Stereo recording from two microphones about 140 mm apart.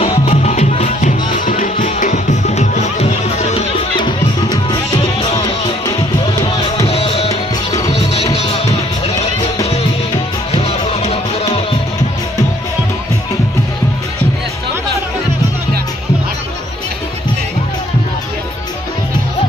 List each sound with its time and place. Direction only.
0.2 s music: 55° left (ahead or behind)
4.0 s music: 30° left (ahead or behind)
6.8 s music: 45° left (ahead or behind)
10.5 s music: 45° left (ahead or behind)